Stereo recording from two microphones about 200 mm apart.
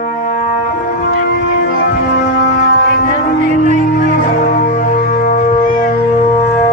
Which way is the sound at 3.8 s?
40° left (ahead or behind).